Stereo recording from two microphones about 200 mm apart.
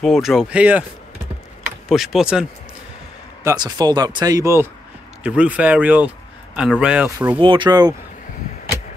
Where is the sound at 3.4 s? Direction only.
20° right (ahead or behind).